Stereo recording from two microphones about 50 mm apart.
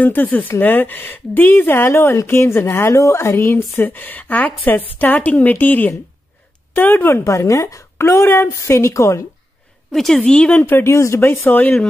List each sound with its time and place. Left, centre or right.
0.0 s a woman's voice: left
1.9 s a woman's voice: left
7.1 s speech: left
7.6 s a woman's voice: left
10.1 s speech: centre
10.5 s a woman's voice: left
10.8 s speech: left
11.1 s speech: left